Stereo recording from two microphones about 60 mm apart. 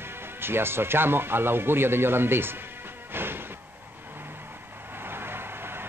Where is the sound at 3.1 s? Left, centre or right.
Right.